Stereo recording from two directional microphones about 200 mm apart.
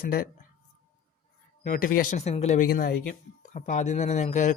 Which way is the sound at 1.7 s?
45° left (ahead or behind).